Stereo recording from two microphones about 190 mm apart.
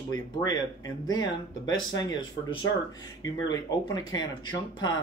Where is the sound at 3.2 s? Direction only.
20° left (ahead or behind).